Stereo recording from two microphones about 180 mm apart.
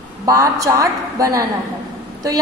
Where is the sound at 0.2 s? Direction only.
20° right (ahead or behind).